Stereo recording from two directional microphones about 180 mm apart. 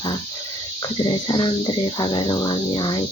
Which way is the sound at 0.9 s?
25° left (ahead or behind).